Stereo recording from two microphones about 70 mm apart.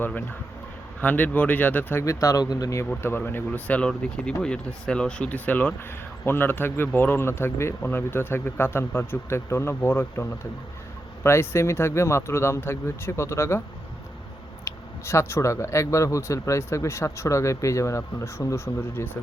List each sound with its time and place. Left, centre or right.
0.0 s speech: left
2.0 s speech: left
2.4 s speech: left
3.0 s a man's voice: left
14.6 s speech: left